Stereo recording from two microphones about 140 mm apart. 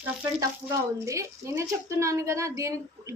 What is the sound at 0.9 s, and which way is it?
A woman's voice, 20° right (ahead or behind).